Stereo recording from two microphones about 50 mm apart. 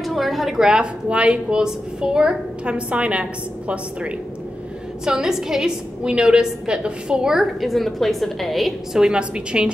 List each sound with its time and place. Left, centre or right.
0.0 s a woman's voice: centre; by 4.1 s right
5.0 s a woman's voice: centre
7.6 s a woman's voice: centre
8.9 s a woman's voice: centre